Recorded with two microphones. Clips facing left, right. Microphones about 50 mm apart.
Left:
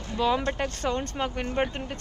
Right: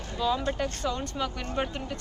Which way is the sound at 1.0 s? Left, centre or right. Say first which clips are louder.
Left 2 dB; left.